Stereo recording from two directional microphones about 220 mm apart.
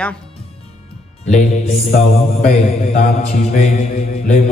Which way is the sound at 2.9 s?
35° left (ahead or behind).